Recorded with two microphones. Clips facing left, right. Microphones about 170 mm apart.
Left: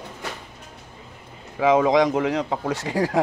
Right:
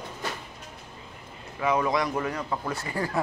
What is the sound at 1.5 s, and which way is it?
Speech, 90° left.